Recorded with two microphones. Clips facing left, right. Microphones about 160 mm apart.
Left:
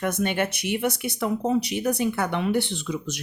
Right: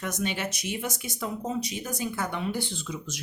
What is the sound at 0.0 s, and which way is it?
Speech, 55° left (ahead or behind).